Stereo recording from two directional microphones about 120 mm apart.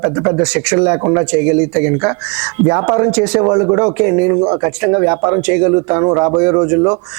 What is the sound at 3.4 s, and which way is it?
Speech, 25° right (ahead or behind).